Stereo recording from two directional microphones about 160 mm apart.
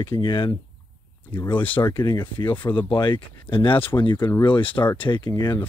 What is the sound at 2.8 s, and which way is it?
Speech, 30° left (ahead or behind).